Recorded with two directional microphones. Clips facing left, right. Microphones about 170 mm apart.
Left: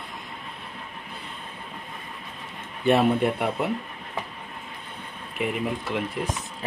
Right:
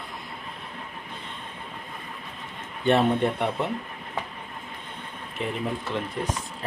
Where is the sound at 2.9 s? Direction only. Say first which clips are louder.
Left 1 dB; 10° left (ahead or behind).